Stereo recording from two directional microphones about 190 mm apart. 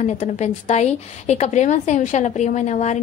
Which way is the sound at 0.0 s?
35° left (ahead or behind).